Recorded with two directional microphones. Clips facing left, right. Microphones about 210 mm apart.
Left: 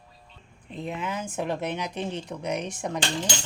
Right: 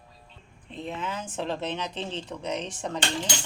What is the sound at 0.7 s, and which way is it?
Speech, 10° left (ahead or behind).